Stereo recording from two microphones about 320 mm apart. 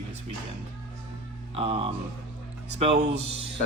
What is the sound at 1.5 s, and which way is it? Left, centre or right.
A man's voice, centre.